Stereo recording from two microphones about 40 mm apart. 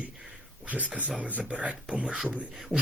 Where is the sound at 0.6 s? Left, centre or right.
Right.